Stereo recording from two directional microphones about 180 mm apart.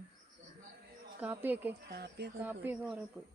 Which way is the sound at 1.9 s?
65° right (ahead or behind).